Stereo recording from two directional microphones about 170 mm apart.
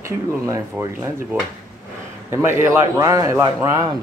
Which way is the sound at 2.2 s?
15° right (ahead or behind).